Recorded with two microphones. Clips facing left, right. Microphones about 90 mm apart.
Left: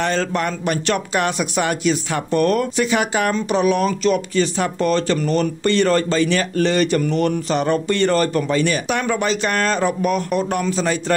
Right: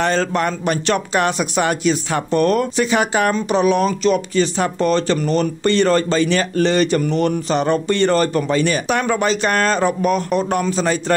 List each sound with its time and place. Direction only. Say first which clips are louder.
0.0 s speech: right 2 dB; 35° right (ahead or behind)